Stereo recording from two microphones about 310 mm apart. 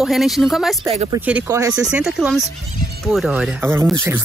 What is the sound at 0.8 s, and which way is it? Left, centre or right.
Speech, centre.